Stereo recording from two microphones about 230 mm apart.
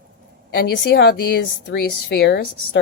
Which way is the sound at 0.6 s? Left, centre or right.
Left.